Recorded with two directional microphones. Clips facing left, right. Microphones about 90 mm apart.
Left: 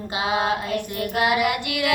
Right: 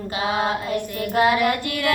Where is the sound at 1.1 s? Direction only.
30° right (ahead or behind).